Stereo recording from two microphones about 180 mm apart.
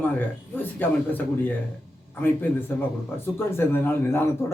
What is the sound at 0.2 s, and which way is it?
Speech, 10° left (ahead or behind).